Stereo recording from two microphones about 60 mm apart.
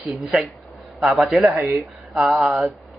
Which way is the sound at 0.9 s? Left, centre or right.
Centre.